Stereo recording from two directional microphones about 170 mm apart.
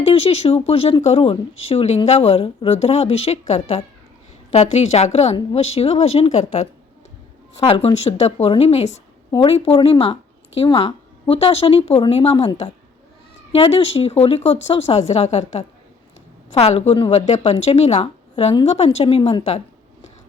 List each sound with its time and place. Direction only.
0.1 s speech: 35° left (ahead or behind)
13.5 s speech: 35° left (ahead or behind)